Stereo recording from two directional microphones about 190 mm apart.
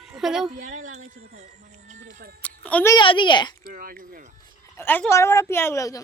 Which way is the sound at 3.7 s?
45° right (ahead or behind).